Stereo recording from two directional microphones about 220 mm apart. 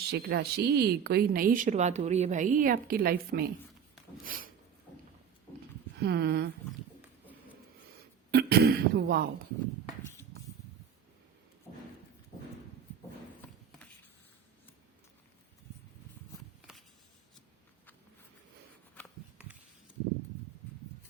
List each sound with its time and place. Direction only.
0.1 s speech: 45° right (ahead or behind)
6.0 s speech: 50° right (ahead or behind)
7.9 s speech: 45° right (ahead or behind)